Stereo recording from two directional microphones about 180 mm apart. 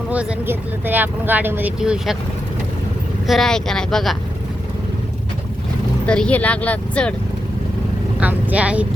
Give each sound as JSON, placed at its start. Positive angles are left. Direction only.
{"t": 0.1, "sound": "speech", "side_deg": -5}
{"t": 3.2, "sound": "speech", "side_deg": 0}
{"t": 6.1, "sound": "speech", "side_deg": 5}
{"t": 8.2, "sound": "speech", "side_deg": -10}